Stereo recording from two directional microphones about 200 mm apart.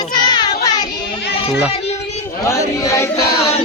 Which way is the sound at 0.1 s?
20° left (ahead or behind).